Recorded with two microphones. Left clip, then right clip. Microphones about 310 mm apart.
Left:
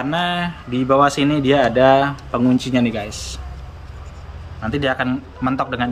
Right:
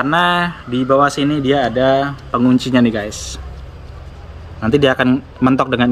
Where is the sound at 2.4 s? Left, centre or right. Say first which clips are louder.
Right 4 dB; centre.